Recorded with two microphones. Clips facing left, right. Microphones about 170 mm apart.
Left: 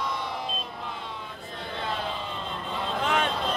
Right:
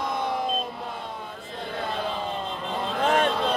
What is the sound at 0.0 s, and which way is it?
Vehicle, 50° right (ahead or behind).